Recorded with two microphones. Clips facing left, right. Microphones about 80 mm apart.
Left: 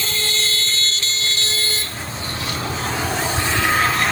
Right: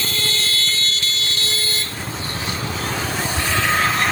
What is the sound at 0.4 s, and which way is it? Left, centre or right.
Vehicle, left.